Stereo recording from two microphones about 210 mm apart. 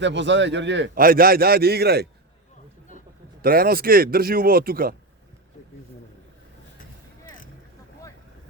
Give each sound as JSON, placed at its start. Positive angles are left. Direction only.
{"t": 0.0, "sound": "a man's voice", "side_deg": -60}
{"t": 3.4, "sound": "a man's voice", "side_deg": -45}